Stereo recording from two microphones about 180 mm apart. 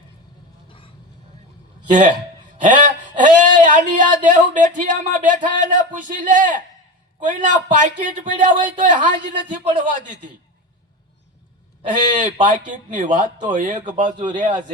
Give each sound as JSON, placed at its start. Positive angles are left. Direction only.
{"t": 1.9, "sound": "speech", "side_deg": -45}
{"t": 11.9, "sound": "speech", "side_deg": -45}